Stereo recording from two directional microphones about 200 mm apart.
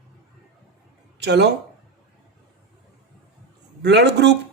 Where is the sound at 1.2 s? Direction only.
55° right (ahead or behind).